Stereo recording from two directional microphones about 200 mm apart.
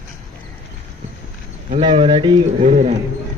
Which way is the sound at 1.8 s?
25° right (ahead or behind).